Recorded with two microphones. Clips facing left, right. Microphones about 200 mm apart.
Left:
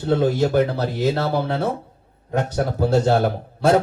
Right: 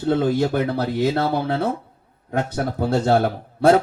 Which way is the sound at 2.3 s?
55° right (ahead or behind).